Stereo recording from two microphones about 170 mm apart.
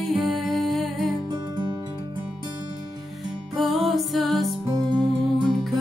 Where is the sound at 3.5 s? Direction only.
Centre (ahead or behind).